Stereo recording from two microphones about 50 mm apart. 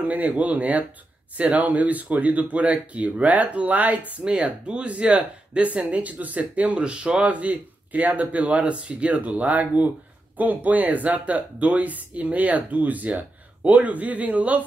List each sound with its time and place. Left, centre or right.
0.0 s speech: right